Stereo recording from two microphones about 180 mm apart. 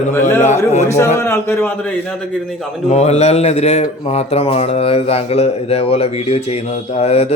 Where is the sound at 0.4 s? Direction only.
40° left (ahead or behind).